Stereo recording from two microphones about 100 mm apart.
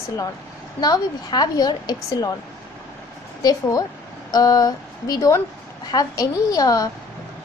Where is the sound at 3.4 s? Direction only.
35° left (ahead or behind).